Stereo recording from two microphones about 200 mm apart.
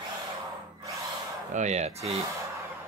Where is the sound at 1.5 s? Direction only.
35° right (ahead or behind).